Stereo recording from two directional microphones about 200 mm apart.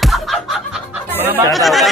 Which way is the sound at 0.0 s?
Centre (ahead or behind).